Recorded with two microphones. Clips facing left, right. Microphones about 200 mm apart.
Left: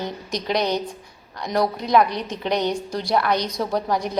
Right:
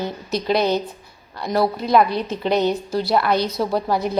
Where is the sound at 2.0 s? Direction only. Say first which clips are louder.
Right 4 dB; 15° left (ahead or behind).